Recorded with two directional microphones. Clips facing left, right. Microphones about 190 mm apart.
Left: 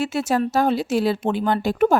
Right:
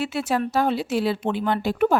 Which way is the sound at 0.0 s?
45° left (ahead or behind).